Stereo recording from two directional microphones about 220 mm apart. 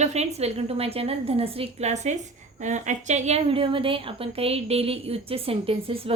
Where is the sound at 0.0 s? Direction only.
30° right (ahead or behind).